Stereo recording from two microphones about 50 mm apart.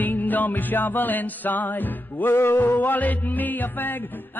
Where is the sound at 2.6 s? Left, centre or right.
Left.